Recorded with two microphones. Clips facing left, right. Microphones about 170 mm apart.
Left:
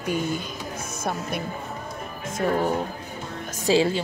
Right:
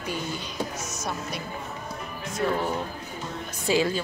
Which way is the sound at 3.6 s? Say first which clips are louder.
Left 3 dB; 30° left (ahead or behind).